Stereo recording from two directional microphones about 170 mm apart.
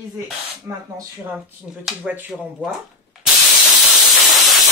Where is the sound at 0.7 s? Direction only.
15° right (ahead or behind).